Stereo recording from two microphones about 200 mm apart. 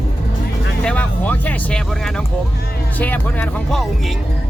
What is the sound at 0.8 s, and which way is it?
Speech, 5° left (ahead or behind).